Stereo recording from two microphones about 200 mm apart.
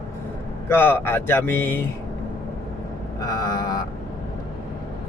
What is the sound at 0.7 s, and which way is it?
Speech, 10° left (ahead or behind).